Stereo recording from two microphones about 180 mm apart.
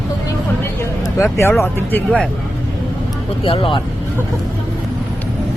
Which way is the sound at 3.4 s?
30° left (ahead or behind).